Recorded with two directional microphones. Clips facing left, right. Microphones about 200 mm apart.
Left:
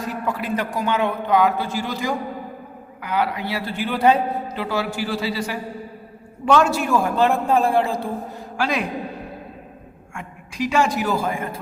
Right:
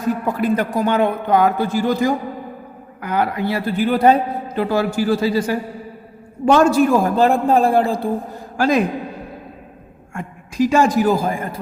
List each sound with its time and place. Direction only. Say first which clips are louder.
0.3 s a man's voice: right 3 dB; 45° right (ahead or behind)
6.9 s a man's voice: right 4 dB; 35° right (ahead or behind)
10.2 s a woman's voice: right 8 dB; 45° right (ahead or behind)